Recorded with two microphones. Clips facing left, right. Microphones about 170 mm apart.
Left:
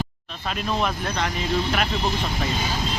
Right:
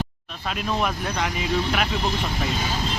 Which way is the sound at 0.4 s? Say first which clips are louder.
Even; centre (ahead or behind).